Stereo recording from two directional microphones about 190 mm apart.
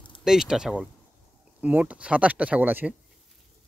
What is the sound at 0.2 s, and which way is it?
Speech, centre (ahead or behind).